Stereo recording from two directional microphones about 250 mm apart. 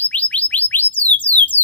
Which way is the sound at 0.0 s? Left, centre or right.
Centre.